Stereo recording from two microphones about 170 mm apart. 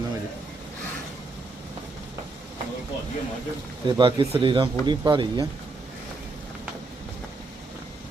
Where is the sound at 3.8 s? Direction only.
30° right (ahead or behind).